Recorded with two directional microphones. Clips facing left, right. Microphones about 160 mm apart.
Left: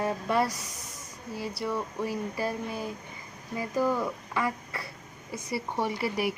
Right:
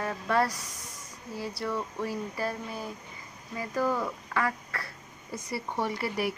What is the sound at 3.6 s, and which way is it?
Speech, 15° left (ahead or behind).